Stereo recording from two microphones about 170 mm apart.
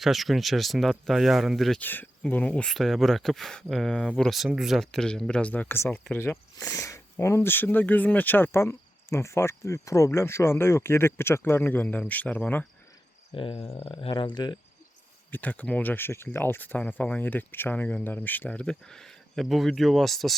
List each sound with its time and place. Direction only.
0.0 s speech: centre (ahead or behind)
1.8 s speech: 10° left (ahead or behind)
13.3 s speech: 30° left (ahead or behind)
15.3 s speech: 10° left (ahead or behind)